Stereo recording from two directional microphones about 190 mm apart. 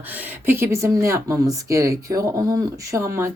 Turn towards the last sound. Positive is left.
turn(degrees=-15)  # may be behind; listen again after turning